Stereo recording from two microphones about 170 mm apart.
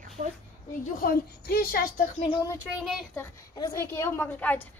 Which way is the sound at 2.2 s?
25° left (ahead or behind).